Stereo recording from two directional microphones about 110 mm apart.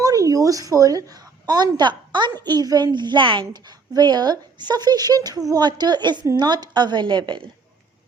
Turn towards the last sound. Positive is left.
turn(degrees=-45)  # may be behind; listen again after turning